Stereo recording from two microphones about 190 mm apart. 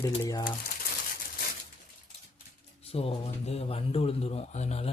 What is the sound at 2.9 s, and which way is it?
A man's voice, 30° left (ahead or behind).